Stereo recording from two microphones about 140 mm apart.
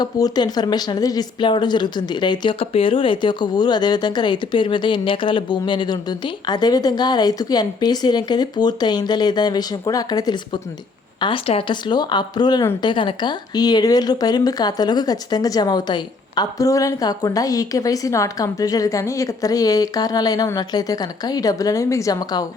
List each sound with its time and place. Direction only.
0.0 s speech: 30° left (ahead or behind)
11.2 s speech: 40° left (ahead or behind)